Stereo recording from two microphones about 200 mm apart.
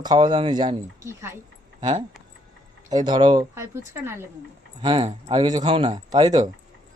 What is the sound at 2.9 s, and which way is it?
A man's voice, 20° right (ahead or behind).